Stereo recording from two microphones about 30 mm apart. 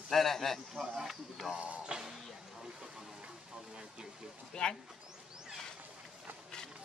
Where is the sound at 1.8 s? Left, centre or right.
Right.